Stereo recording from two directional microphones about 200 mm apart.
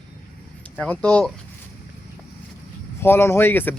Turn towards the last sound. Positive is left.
turn(degrees=10)  # may be behind; listen again after turning